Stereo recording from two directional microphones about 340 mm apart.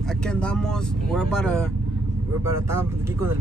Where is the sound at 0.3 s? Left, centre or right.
Centre.